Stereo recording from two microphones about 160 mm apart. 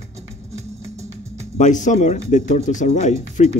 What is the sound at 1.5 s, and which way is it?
Speech, 50° left (ahead or behind).